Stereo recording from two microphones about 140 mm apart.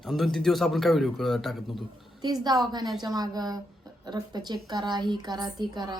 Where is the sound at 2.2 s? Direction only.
30° right (ahead or behind).